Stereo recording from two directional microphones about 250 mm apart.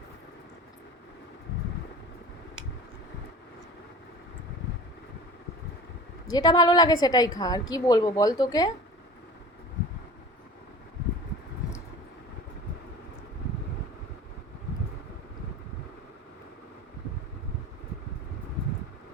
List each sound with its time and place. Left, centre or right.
6.3 s a woman's voice: centre